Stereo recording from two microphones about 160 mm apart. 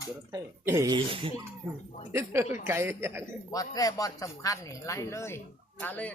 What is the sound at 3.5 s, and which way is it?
Speech, 25° left (ahead or behind).